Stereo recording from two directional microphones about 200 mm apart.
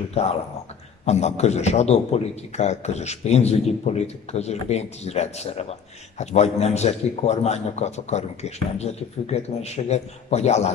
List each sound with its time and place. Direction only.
1.0 s a man's voice: 35° left (ahead or behind)